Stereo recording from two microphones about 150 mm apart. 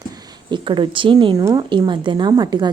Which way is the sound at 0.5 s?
30° right (ahead or behind).